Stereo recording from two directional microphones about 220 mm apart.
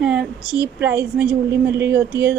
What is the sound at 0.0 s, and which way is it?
Speech, 5° right (ahead or behind).